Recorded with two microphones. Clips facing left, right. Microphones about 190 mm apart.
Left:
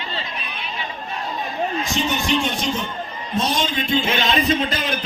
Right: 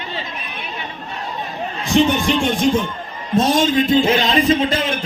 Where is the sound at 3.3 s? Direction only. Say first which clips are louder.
Right 8 dB; 45° right (ahead or behind); by 5.0 s 30° right (ahead or behind).